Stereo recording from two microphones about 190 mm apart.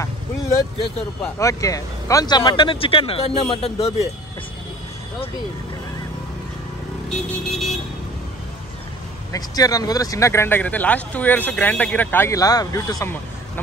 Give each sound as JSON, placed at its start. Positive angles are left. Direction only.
{"t": 1.4, "sound": "speech", "side_deg": 15}
{"t": 7.1, "sound": "vehicle", "side_deg": 0}
{"t": 9.3, "sound": "speech", "side_deg": 20}